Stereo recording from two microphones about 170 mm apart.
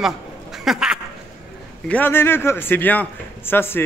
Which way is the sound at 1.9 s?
10° left (ahead or behind).